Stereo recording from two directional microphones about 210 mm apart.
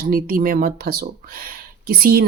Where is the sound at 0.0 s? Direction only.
45° right (ahead or behind).